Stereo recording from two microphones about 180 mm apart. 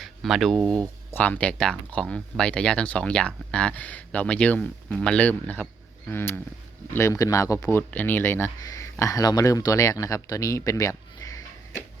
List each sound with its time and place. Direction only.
0.0 s speech: centre (ahead or behind); by 11.8 s 20° left (ahead or behind)